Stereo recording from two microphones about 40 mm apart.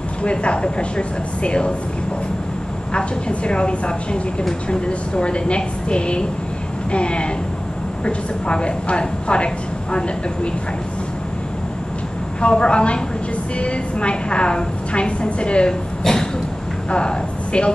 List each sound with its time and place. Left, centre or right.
0.2 s a woman's voice: left
2.9 s a woman's voice: left
12.4 s a woman's voice: left
16.0 s a sound: centre
16.9 s a woman's voice: left